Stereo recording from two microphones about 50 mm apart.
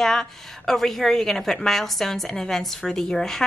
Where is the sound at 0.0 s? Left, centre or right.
Centre.